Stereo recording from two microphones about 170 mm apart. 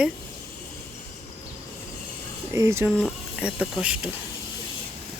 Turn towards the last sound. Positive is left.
turn(degrees=-5)  # may be behind; listen again after turning